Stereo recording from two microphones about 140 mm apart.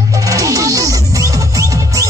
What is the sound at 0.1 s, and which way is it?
Music, 25° right (ahead or behind).